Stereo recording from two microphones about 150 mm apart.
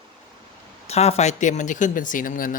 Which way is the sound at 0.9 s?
45° left (ahead or behind).